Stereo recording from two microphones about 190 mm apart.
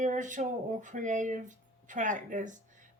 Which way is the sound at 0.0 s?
40° right (ahead or behind).